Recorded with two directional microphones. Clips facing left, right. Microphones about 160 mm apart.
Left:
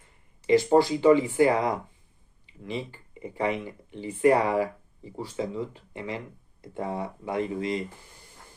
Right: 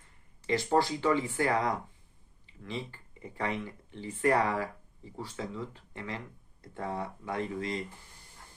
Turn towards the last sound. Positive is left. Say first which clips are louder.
# left 6 dB
turn(degrees=20)  # may be behind; listen again after turning